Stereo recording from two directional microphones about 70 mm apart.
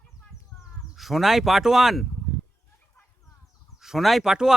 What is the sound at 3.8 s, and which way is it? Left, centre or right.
Speech, centre.